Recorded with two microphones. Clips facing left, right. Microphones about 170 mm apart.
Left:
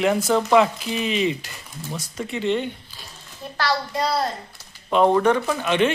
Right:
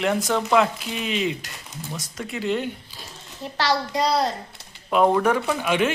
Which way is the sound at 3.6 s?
20° right (ahead or behind).